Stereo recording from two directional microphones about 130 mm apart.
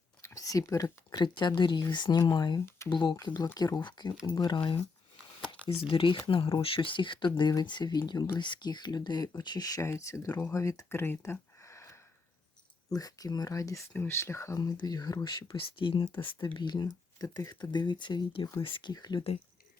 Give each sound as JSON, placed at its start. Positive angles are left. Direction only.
{"t": 0.2, "sound": "speech", "side_deg": 25}
{"t": 2.6, "sound": "a sound", "side_deg": 20}
{"t": 2.9, "sound": "speech", "side_deg": 35}